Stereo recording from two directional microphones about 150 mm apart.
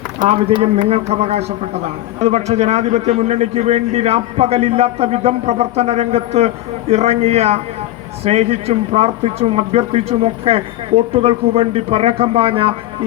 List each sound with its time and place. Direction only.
0.3 s a man's voice: 40° right (ahead or behind)